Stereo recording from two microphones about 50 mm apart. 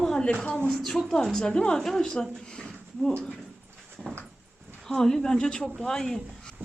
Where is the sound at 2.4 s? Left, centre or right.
Centre.